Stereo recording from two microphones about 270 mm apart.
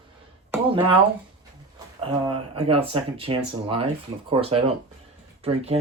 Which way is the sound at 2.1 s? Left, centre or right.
Centre.